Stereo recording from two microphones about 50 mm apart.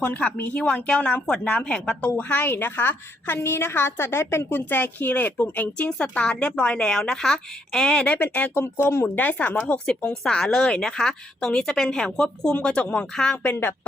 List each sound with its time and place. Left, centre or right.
0.0 s speech: left
2.1 s a woman's voice: left
6.0 s a woman's voice: left
8.0 s speech: left
8.5 s a woman's voice: left
9.1 s speech: left
9.8 s a woman's voice: centre
13.3 s a woman's voice: left